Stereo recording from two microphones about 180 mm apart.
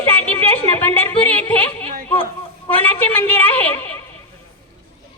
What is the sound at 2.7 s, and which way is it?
A woman's voice, 10° left (ahead or behind).